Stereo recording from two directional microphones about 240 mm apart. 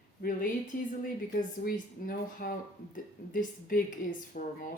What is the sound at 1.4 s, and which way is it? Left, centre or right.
Speech, left.